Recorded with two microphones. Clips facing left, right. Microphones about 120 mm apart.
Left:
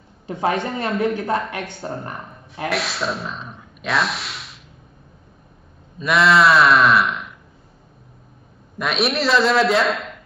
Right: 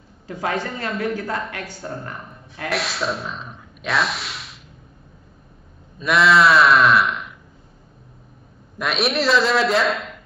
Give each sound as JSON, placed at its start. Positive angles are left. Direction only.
{"t": 0.3, "sound": "speech", "side_deg": 20}
{"t": 2.7, "sound": "speech", "side_deg": 0}
{"t": 5.9, "sound": "speech", "side_deg": 0}
{"t": 8.7, "sound": "a man's voice", "side_deg": 0}